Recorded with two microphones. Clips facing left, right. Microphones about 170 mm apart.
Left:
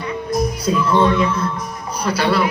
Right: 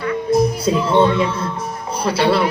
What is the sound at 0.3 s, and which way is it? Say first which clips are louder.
Speech: right 4 dB; 30° right (ahead or behind).